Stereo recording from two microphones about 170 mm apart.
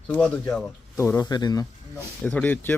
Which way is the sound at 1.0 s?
15° left (ahead or behind).